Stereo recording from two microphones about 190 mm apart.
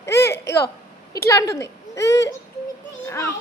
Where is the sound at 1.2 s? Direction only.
15° left (ahead or behind).